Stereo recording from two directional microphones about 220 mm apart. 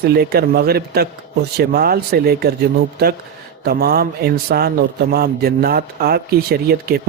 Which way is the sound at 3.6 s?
45° right (ahead or behind).